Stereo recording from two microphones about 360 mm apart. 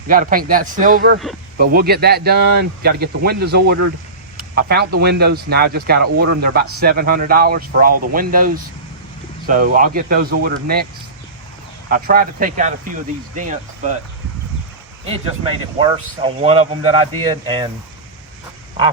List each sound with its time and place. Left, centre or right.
0.1 s speech: right
11.9 s speech: right
15.8 s speech: centre